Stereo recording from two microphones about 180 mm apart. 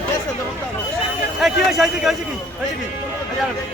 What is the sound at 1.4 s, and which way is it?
Speech, centre (ahead or behind).